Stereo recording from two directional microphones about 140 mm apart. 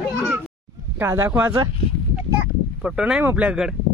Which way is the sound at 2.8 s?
5° right (ahead or behind).